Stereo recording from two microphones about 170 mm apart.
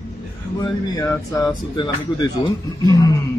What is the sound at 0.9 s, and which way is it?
Speech, 20° left (ahead or behind).